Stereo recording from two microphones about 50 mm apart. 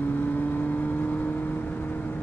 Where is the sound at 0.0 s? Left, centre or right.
Left.